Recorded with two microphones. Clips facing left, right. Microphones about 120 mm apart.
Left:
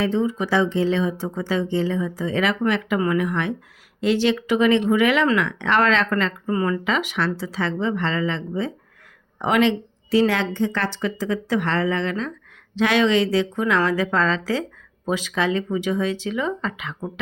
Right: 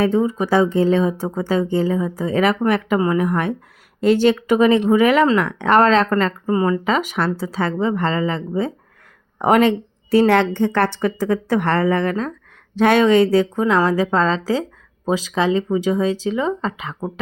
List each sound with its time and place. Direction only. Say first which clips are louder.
0.0 s speech: right 4 dB; 50° right (ahead or behind)
3.0 s speech: right 3 dB; 35° right (ahead or behind)
6.5 s speech: right 4 dB; 30° right (ahead or behind)
6.8 s speech: right 4 dB; 45° right (ahead or behind)
13.6 s speech: right 4 dB; 30° right (ahead or behind)